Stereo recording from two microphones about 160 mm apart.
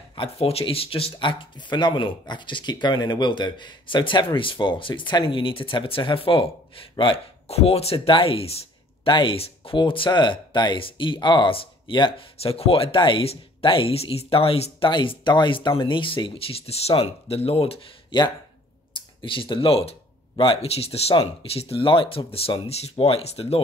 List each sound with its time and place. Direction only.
0.1 s speech: 35° left (ahead or behind)